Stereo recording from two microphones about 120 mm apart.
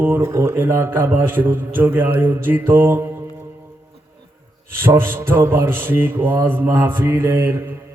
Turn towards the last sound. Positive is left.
turn(degrees=-20)  # may be behind; listen again after turning